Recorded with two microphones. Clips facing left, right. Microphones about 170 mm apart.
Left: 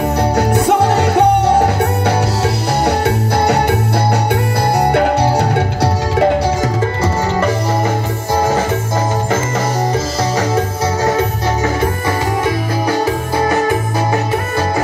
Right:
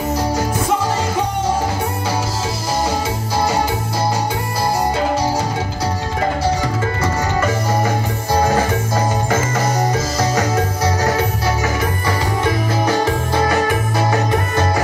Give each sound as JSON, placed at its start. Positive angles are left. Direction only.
{"t": 0.2, "sound": "music", "side_deg": 65}
{"t": 3.3, "sound": "music", "side_deg": 65}
{"t": 4.7, "sound": "music", "side_deg": 65}